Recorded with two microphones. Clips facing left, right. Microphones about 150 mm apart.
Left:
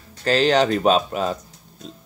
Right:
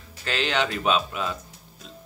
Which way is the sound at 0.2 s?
40° left (ahead or behind).